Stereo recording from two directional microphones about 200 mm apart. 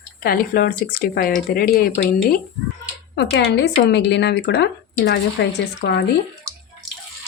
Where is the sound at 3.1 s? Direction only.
60° left (ahead or behind).